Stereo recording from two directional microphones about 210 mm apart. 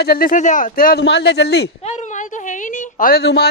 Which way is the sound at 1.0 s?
55° left (ahead or behind).